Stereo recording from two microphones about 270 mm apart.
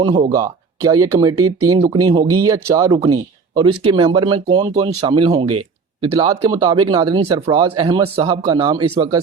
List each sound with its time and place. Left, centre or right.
0.3 s speech: centre